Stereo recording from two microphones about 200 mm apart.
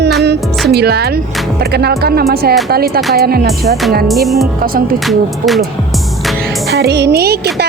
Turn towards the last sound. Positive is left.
turn(degrees=-55)  # may be behind; listen again after turning